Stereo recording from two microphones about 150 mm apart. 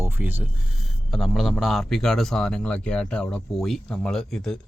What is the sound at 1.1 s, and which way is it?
A man's voice, centre (ahead or behind).